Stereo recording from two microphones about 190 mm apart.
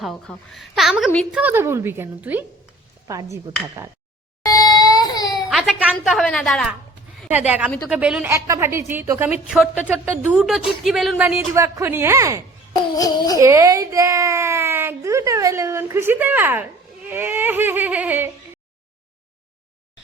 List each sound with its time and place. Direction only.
0.0 s a woman's voice: centre (ahead or behind)
1.4 s a woman's voice: 10° right (ahead or behind)
4.4 s crying: 20° left (ahead or behind)
5.5 s a woman's voice: centre (ahead or behind)
13.0 s a sound: 20° left (ahead or behind)
13.4 s a woman's voice: 15° right (ahead or behind)